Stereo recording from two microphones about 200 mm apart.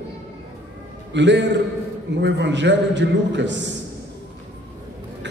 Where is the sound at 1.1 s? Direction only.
65° right (ahead or behind).